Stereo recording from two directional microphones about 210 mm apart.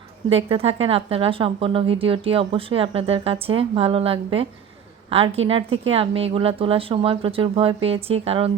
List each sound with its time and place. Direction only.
0.5 s speech: 30° right (ahead or behind)
5.5 s speech: 25° right (ahead or behind)